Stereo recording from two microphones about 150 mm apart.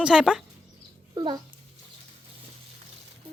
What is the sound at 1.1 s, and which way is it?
Speech, 30° right (ahead or behind).